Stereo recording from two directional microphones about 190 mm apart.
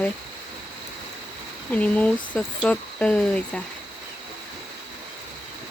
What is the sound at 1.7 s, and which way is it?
Speech, 5° left (ahead or behind).